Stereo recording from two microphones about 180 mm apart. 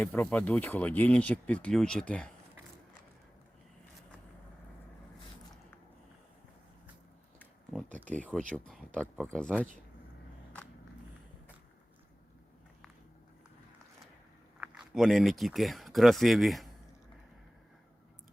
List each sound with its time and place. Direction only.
0.0 s speech: 10° left (ahead or behind)
7.3 s a sound: centre (ahead or behind)
8.5 s speech: 5° left (ahead or behind)
14.6 s speech: centre (ahead or behind)